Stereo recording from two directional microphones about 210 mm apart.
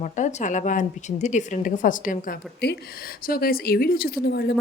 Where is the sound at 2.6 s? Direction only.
50° left (ahead or behind).